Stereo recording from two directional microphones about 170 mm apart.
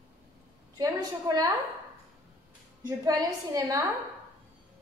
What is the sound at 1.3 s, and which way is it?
Speech, 25° right (ahead or behind).